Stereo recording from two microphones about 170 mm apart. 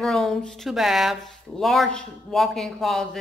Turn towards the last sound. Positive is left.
turn(degrees=0)  # may be behind; listen again after turning